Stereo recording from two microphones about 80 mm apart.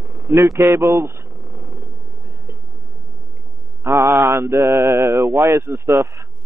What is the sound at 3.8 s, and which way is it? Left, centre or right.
Speech, right.